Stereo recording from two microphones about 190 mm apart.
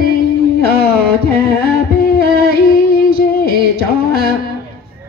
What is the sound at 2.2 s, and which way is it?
Music, 50° left (ahead or behind).